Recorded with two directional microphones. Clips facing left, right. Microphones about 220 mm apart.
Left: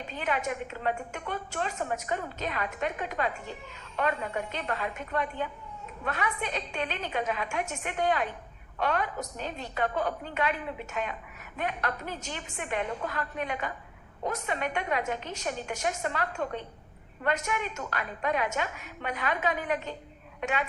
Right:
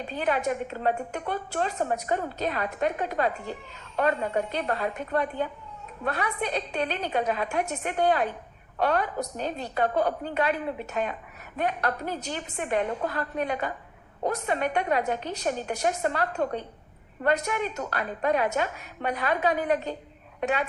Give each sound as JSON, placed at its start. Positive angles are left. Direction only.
{"t": 0.2, "sound": "a woman's voice", "side_deg": -35}